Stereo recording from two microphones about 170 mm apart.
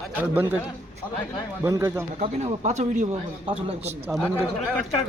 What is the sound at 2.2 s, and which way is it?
Speech, 40° right (ahead or behind).